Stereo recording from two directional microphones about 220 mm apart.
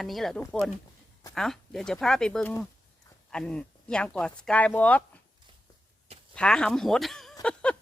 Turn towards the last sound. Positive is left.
turn(degrees=5)  # may be behind; listen again after turning